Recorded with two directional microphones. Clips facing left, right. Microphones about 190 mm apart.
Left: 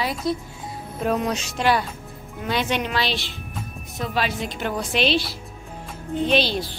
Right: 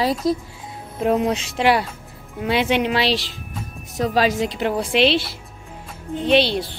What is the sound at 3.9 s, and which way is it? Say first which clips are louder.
Speech: right 7 dB; 40° right (ahead or behind).